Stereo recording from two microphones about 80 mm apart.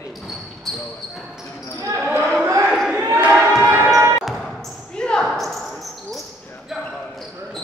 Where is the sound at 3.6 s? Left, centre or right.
Right.